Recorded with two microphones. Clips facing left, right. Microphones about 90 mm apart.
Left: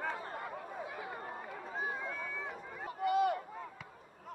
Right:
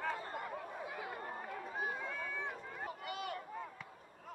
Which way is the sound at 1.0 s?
20° left (ahead or behind).